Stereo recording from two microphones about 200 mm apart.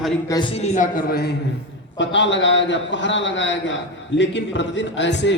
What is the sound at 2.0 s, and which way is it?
A man's voice, 65° left (ahead or behind).